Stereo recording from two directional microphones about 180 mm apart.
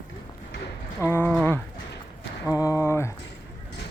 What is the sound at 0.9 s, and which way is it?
Speech, 10° left (ahead or behind).